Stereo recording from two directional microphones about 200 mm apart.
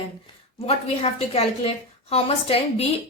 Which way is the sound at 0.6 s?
30° left (ahead or behind).